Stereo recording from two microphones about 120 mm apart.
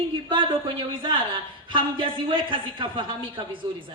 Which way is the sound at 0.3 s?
45° right (ahead or behind).